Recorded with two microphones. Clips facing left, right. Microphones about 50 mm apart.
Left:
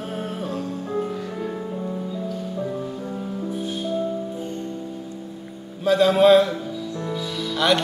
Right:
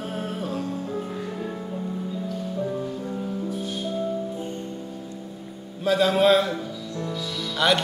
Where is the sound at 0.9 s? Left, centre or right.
Centre.